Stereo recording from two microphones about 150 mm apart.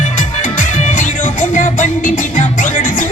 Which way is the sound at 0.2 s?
55° left (ahead or behind).